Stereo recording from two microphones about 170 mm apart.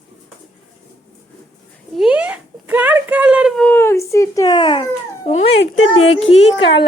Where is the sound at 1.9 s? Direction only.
5° right (ahead or behind).